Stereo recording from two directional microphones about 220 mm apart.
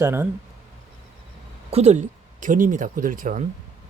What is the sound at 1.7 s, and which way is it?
Speech, 30° right (ahead or behind).